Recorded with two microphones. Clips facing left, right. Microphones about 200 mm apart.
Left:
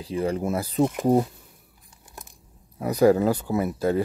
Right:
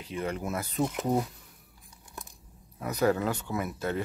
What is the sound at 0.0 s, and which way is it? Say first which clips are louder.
Speech: left 7 dB; 35° left (ahead or behind).